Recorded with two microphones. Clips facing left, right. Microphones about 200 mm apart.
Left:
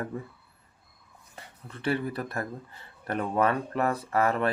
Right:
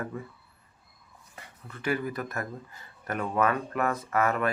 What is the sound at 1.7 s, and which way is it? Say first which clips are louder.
Speech: left 1 dB; 30° left (ahead or behind).